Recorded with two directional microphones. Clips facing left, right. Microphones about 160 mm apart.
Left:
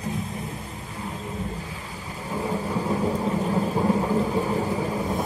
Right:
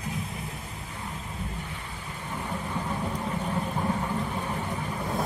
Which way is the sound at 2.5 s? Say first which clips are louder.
Left 6 dB; 35° left (ahead or behind).